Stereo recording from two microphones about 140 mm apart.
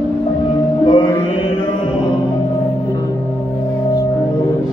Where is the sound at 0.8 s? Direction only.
35° left (ahead or behind).